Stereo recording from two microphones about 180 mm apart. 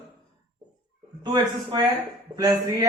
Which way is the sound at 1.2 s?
25° right (ahead or behind).